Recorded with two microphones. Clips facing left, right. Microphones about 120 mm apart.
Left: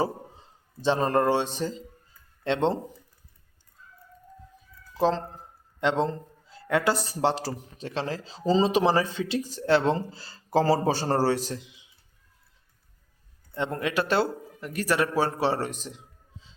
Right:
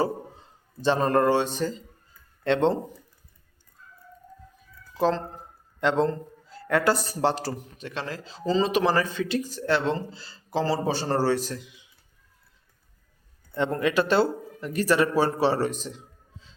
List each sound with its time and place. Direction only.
0.8 s a man's voice: 25° left (ahead or behind)
4.9 s a man's voice: 25° left (ahead or behind)
13.7 s a man's voice: 10° left (ahead or behind)
15.6 s a sound: 15° left (ahead or behind)